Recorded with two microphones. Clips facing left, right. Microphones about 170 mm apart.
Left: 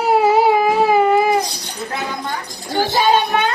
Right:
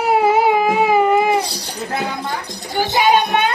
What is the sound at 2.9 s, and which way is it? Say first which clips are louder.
Speech: right 1 dB; 15° right (ahead or behind).